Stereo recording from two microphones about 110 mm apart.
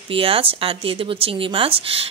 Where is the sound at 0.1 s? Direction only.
55° right (ahead or behind).